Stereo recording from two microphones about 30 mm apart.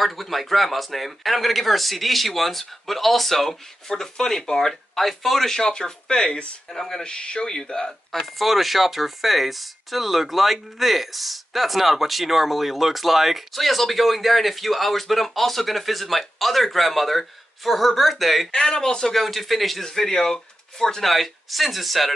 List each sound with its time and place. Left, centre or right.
0.0 s speech: centre
5.5 s speech: left
8.1 s speech: centre
18.5 s speech: left
19.1 s speech: centre
19.8 s speech: centre
21.0 s speech: centre